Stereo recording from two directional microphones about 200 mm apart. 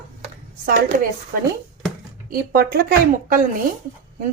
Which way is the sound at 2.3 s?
50° right (ahead or behind).